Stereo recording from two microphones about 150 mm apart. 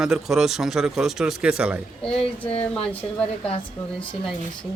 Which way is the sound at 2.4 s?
10° left (ahead or behind).